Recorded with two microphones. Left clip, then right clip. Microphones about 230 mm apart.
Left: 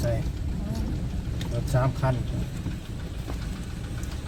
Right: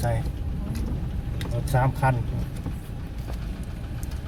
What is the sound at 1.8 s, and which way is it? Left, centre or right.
Speech, right.